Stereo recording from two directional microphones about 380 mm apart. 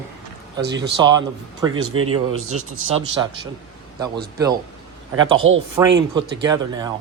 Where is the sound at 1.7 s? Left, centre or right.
Right.